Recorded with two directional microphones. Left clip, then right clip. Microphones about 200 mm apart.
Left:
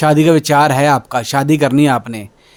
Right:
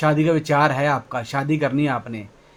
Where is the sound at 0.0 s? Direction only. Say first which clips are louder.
Left 8 dB; 55° left (ahead or behind).